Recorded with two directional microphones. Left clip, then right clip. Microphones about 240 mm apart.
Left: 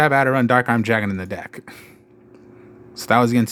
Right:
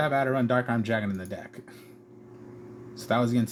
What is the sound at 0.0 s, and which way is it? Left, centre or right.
Speech, left.